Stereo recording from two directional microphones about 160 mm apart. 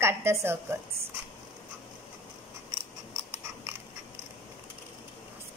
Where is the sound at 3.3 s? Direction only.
15° right (ahead or behind).